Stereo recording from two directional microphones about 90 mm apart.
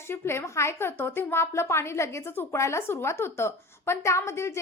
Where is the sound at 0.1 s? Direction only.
30° left (ahead or behind).